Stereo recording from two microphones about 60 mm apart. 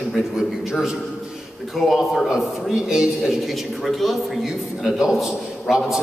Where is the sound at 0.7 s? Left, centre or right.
Centre.